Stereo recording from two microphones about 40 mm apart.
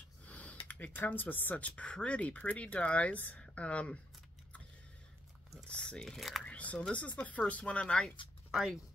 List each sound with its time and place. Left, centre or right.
0.2 s gasp: left
0.9 s speech: left
1.6 s speech: left
5.7 s speech: left
6.0 s speech: centre
6.4 s speech: left
8.5 s speech: centre